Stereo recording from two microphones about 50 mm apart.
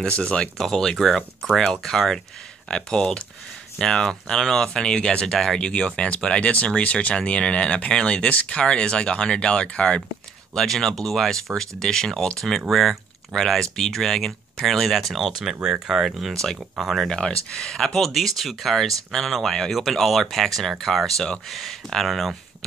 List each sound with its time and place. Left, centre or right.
0.2 s speech: centre
17.1 s speech: centre